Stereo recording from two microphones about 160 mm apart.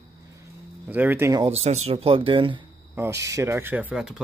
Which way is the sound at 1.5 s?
40° right (ahead or behind).